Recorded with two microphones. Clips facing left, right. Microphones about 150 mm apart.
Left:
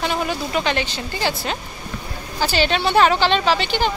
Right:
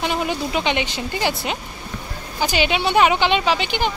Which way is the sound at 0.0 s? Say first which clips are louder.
Even; 15° right (ahead or behind).